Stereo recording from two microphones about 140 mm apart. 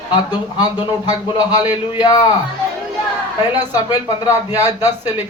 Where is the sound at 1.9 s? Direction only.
30° left (ahead or behind).